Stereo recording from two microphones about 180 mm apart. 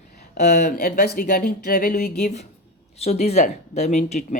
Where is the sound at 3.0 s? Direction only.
35° left (ahead or behind).